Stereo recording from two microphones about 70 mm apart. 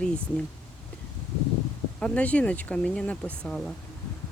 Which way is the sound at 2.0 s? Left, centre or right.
Centre.